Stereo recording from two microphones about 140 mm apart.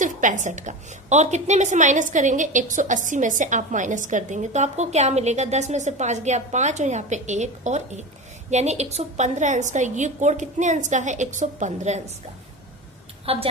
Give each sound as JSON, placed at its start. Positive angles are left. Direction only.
{"t": 0.0, "sound": "a woman's voice", "side_deg": -65}
{"t": 13.2, "sound": "a woman's voice", "side_deg": -45}